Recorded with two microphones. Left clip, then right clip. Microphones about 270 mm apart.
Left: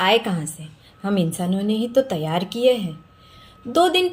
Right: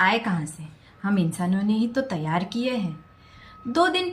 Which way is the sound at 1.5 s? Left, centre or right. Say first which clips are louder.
Left 7 dB; centre.